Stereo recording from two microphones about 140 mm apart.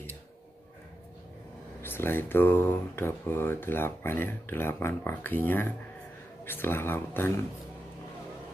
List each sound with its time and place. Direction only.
1.8 s speech: 15° left (ahead or behind)